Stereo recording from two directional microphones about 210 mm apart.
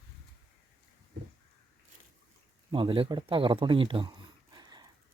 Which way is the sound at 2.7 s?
25° right (ahead or behind).